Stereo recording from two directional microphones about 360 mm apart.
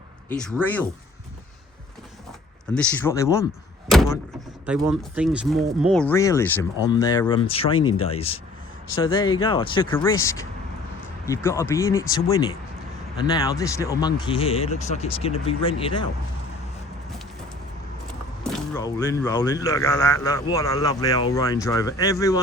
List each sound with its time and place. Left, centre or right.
0.3 s speech: centre
2.7 s speech: centre
3.8 s door: centre
4.6 s speech: centre
7.8 s speech: left
8.0 s speech: centre
18.4 s speech: centre